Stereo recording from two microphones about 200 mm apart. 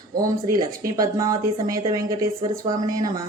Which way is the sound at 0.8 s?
15° right (ahead or behind).